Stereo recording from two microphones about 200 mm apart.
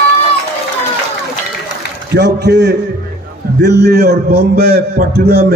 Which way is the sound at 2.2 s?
55° right (ahead or behind).